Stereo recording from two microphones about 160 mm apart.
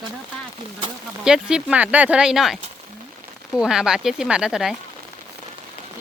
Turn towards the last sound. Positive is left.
turn(degrees=-5)  # may be behind; listen again after turning